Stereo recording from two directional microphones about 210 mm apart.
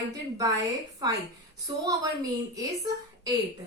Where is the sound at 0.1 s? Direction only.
15° right (ahead or behind).